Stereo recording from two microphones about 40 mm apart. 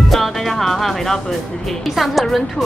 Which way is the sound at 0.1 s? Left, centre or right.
Centre.